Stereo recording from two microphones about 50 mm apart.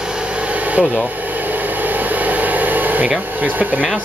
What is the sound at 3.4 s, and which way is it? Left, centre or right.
Speech, right.